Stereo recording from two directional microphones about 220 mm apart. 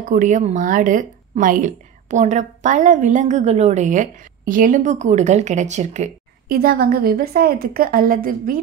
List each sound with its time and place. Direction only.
0.0 s speech: 35° right (ahead or behind)